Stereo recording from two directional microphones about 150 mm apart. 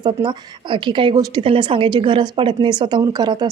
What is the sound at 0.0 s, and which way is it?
A woman's voice, 30° right (ahead or behind).